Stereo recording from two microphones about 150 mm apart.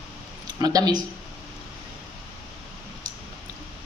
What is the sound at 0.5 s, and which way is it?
Speech, 25° right (ahead or behind).